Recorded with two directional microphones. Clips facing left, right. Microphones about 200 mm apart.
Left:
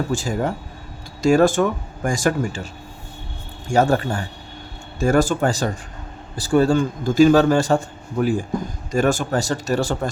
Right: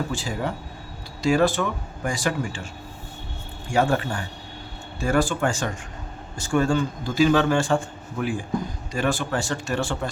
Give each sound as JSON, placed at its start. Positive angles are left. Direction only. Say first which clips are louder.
{"t": 0.1, "sound": "speech", "louder": "left 6 dB", "side_deg": 45}
{"t": 3.7, "sound": "a man's voice", "louder": "left 4 dB", "side_deg": 40}